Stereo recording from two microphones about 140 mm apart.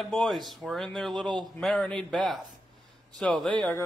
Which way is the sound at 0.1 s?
Centre (ahead or behind).